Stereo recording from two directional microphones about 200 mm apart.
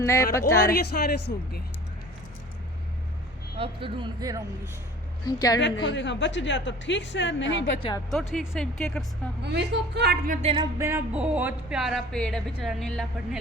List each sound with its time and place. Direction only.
0.0 s speech: 15° left (ahead or behind)
0.7 s speech: 50° left (ahead or behind)
3.6 s speech: 25° right (ahead or behind)
5.2 s a woman's voice: 20° left (ahead or behind)
5.5 s a woman's voice: 65° left (ahead or behind)
7.8 s a woman's voice: 25° left (ahead or behind)
8.1 s speech: centre (ahead or behind)
9.4 s speech: 60° right (ahead or behind)
10.4 s speech: 30° right (ahead or behind)
10.8 s speech: 15° right (ahead or behind)